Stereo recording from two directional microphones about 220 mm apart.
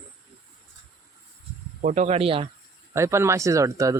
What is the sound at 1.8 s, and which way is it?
Speech, 35° right (ahead or behind).